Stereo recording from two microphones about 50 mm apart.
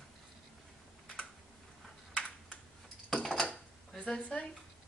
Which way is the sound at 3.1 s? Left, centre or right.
Centre.